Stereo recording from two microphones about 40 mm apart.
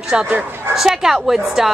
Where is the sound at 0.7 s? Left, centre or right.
Centre.